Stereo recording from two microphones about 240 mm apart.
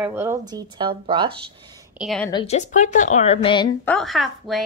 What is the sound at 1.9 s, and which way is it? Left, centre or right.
Speech, centre.